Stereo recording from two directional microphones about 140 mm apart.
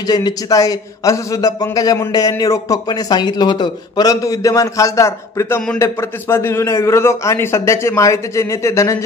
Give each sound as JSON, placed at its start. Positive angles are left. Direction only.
{"t": 0.0, "sound": "a man's voice", "side_deg": 30}